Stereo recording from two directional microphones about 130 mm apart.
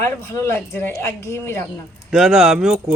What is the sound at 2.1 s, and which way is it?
Speech, 5° right (ahead or behind).